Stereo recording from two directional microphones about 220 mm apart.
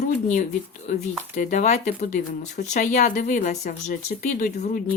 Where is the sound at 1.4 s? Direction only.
35° left (ahead or behind).